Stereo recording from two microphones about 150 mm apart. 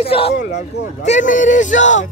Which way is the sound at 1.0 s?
55° left (ahead or behind).